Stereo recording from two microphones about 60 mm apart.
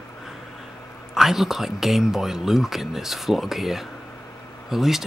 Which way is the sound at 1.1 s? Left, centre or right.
Centre.